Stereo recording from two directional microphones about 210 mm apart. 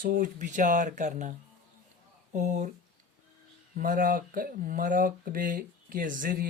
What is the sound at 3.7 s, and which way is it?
Speech, 40° right (ahead or behind).